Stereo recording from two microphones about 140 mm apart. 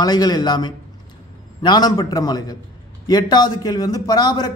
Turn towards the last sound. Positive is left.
turn(degrees=30)  # may be behind; listen again after turning